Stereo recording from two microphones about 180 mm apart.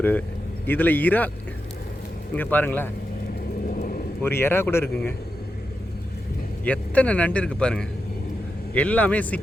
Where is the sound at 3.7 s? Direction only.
50° left (ahead or behind).